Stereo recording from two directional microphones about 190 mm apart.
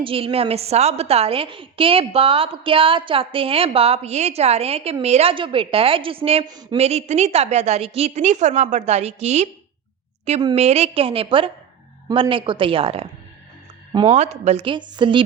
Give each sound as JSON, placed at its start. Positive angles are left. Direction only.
{"t": 0.0, "sound": "a woman's voice", "side_deg": -30}
{"t": 6.7, "sound": "a woman's voice", "side_deg": -35}